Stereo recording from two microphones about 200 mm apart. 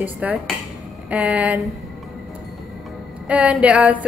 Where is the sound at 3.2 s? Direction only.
5° right (ahead or behind).